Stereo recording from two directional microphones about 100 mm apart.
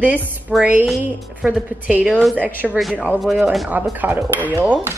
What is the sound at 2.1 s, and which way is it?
Speech, centre (ahead or behind).